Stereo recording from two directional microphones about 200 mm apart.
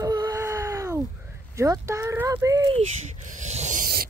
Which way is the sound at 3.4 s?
35° right (ahead or behind).